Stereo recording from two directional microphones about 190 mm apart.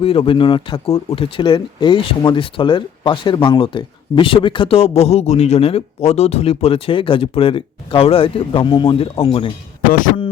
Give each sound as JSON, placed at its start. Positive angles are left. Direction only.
{"t": 0.0, "sound": "speech", "side_deg": 30}